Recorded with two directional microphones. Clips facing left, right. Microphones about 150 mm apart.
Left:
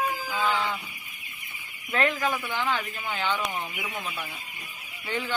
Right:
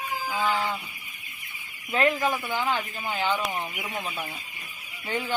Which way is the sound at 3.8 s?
25° right (ahead or behind).